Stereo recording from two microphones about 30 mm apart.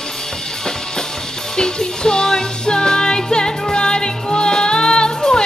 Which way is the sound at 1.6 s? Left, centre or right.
Left.